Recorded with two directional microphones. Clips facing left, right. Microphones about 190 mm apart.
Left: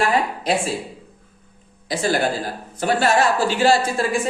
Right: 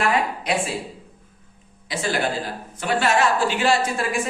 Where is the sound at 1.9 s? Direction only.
35° left (ahead or behind).